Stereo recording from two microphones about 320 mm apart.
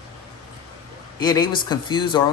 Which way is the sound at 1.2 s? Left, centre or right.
Centre.